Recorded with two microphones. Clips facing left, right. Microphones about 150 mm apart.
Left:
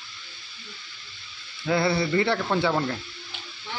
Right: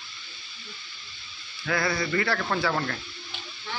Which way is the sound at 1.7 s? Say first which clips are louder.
Left 4 dB; 30° left (ahead or behind).